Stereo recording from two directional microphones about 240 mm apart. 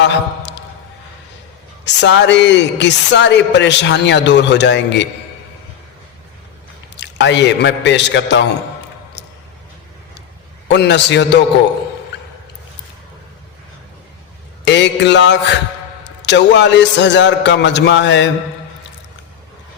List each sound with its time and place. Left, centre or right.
0.0 s a man's voice: left
1.8 s speech: left
6.9 s speech: left
10.7 s speech: left
14.6 s mantra: left
16.2 s speech: left